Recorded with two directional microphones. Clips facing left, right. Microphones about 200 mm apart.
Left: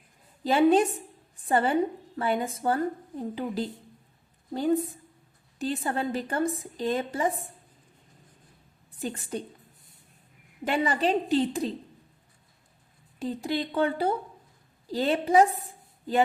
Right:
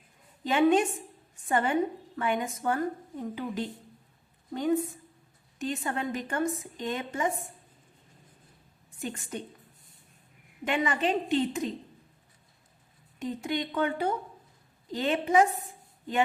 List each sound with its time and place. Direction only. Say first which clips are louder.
0.4 s a woman's voice: left 2 dB; 35° left (ahead or behind)
8.9 s a woman's voice: left 3 dB; 35° left (ahead or behind)
10.6 s a woman's voice: left 2 dB; 35° left (ahead or behind)
13.1 s a woman's voice: left 2 dB; 35° left (ahead or behind)